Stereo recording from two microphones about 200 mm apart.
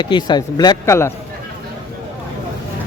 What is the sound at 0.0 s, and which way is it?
Speech, 20° left (ahead or behind).